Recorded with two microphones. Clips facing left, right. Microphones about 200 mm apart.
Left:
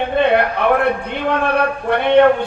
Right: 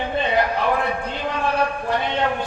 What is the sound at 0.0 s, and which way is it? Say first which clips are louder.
A man's voice: left 6 dB; 60° left (ahead or behind).